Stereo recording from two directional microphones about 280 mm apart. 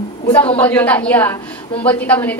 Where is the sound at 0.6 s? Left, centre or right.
Centre.